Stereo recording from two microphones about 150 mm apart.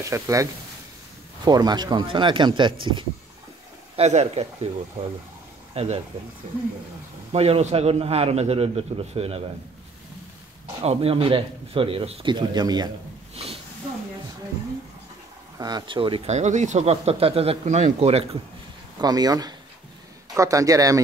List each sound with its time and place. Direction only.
0.0 s a man's voice: 20° right (ahead or behind)
3.9 s speech: 45° right (ahead or behind)
5.7 s speech: 45° right (ahead or behind)
7.3 s speech: 40° right (ahead or behind)
10.8 s speech: 40° right (ahead or behind)
13.3 s a sound: 40° right (ahead or behind)
15.5 s speech: 25° right (ahead or behind)
16.3 s speech: 50° right (ahead or behind)
18.9 s a man's voice: 25° right (ahead or behind)